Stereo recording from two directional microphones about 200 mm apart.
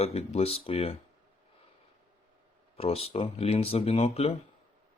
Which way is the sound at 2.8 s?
30° left (ahead or behind).